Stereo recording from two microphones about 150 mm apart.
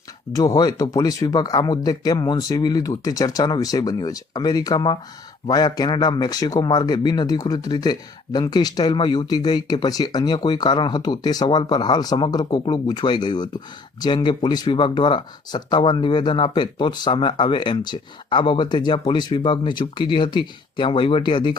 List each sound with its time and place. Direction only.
0.3 s speech: 25° left (ahead or behind)